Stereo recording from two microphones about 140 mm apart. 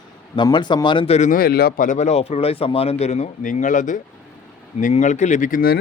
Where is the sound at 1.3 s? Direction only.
90° left.